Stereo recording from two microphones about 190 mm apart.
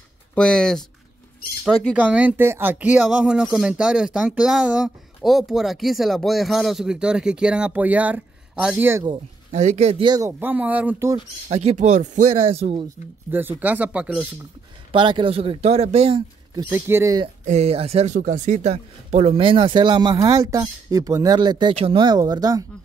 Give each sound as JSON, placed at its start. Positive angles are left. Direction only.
{"t": 0.3, "sound": "speech", "side_deg": 5}
{"t": 2.0, "sound": "speech", "side_deg": -5}
{"t": 9.0, "sound": "speech", "side_deg": -35}
{"t": 11.4, "sound": "speech", "side_deg": -35}
{"t": 13.3, "sound": "speech", "side_deg": -10}
{"t": 14.9, "sound": "speech", "side_deg": -25}
{"t": 16.7, "sound": "speech", "side_deg": -15}
{"t": 17.5, "sound": "speech", "side_deg": -35}